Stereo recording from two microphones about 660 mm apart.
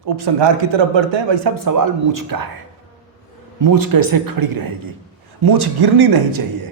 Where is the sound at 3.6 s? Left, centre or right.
Right.